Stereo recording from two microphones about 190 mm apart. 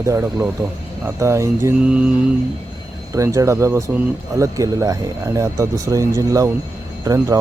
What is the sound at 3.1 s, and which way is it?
Speech, 15° right (ahead or behind).